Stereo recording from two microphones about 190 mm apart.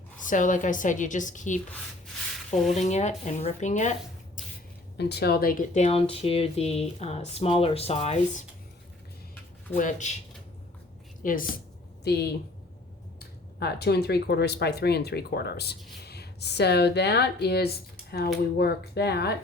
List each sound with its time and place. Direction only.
0.2 s a woman's voice: 45° left (ahead or behind)
2.7 s speech: 35° left (ahead or behind)
4.4 s a sound: 45° left (ahead or behind)
4.9 s speech: 60° left (ahead or behind); by 8.4 s 35° left (ahead or behind)
9.7 s a woman's voice: 45° left (ahead or behind)
11.2 s a woman's voice: 45° left (ahead or behind)
12.0 s speech: 60° left (ahead or behind)